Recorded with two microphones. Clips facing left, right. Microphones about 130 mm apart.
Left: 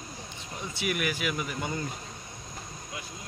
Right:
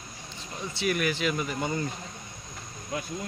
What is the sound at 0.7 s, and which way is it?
Speech, 10° left (ahead or behind).